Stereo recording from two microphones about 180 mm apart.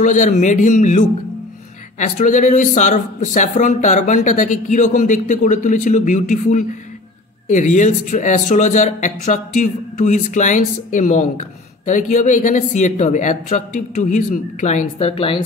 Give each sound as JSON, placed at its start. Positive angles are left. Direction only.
{"t": 0.0, "sound": "speech", "side_deg": 45}